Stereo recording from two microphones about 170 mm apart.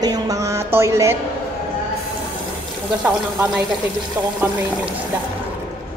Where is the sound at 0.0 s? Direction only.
20° right (ahead or behind).